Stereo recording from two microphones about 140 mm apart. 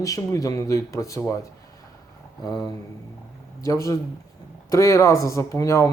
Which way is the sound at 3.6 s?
25° left (ahead or behind).